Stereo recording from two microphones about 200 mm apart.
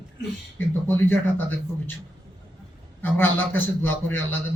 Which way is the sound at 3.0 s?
10° left (ahead or behind).